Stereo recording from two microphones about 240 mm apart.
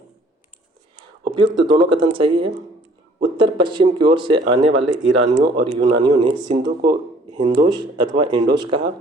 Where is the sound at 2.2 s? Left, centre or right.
Right.